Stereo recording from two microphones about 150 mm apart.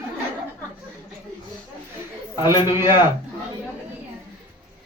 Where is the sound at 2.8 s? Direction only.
25° left (ahead or behind).